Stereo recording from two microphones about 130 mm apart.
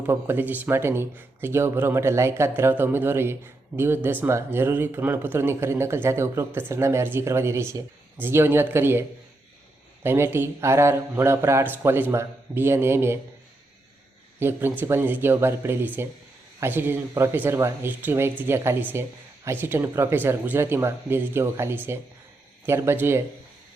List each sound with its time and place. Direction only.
0.1 s speech: 15° right (ahead or behind)
14.3 s speech: 15° right (ahead or behind)